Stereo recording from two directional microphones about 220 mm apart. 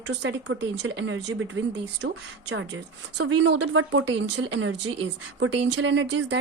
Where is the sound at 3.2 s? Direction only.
55° right (ahead or behind).